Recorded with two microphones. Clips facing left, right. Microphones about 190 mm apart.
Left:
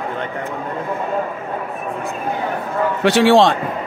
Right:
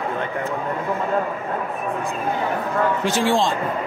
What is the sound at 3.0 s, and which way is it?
Speech, 70° left (ahead or behind).